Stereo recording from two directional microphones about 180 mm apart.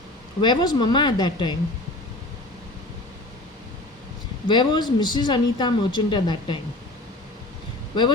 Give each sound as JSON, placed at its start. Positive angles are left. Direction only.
{"t": 0.4, "sound": "speech", "side_deg": 25}
{"t": 4.4, "sound": "speech", "side_deg": 25}